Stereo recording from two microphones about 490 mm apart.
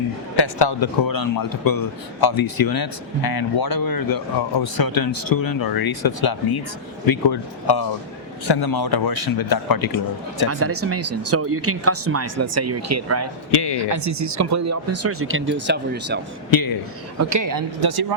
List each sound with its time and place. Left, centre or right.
0.3 s speech: left
10.5 s speech: right
13.5 s speech: left
13.7 s speech: right
16.5 s speech: left
17.2 s speech: right